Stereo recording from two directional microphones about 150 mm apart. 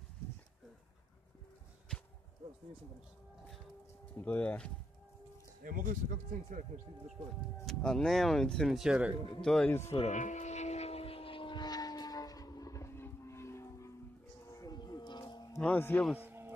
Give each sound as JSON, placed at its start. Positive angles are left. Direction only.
{"t": 4.2, "sound": "a man's voice", "side_deg": 10}
{"t": 5.6, "sound": "speech", "side_deg": -65}
{"t": 6.7, "sound": "speech", "side_deg": -50}
{"t": 7.6, "sound": "speech", "side_deg": 5}
{"t": 9.7, "sound": "a man's voice", "side_deg": 15}
{"t": 9.9, "sound": "vehicle", "side_deg": 50}
{"t": 14.5, "sound": "a sound", "side_deg": 25}
{"t": 15.6, "sound": "a man's voice", "side_deg": 10}
{"t": 16.2, "sound": "music", "side_deg": -15}